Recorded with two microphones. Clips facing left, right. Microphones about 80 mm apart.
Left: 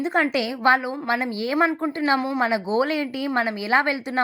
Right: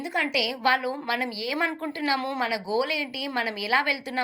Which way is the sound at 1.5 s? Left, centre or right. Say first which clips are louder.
Left 8 dB; centre.